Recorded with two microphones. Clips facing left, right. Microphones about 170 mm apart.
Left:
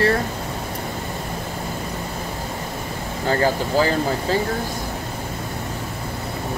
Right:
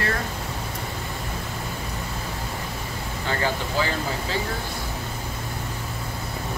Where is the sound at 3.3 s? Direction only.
40° left (ahead or behind).